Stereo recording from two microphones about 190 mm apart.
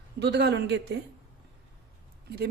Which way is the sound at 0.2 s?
65° right (ahead or behind).